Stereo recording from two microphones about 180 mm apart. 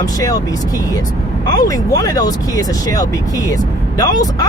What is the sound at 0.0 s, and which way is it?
Speech, 20° left (ahead or behind).